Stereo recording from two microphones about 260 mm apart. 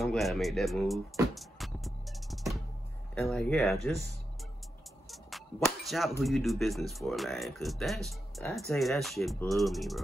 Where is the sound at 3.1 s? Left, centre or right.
Centre.